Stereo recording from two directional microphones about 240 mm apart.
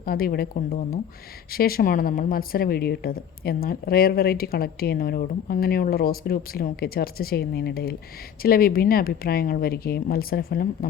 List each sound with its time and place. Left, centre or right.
0.0 s a woman's voice: left